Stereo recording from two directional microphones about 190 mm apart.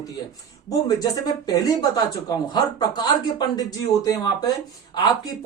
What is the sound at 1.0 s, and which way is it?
Speech, 20° left (ahead or behind).